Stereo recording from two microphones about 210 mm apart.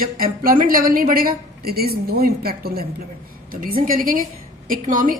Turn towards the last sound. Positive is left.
turn(degrees=-40)  # may be behind; listen again after turning